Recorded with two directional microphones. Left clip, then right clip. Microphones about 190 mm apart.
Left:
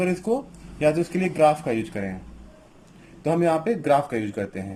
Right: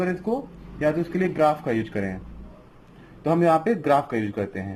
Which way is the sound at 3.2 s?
Centre (ahead or behind).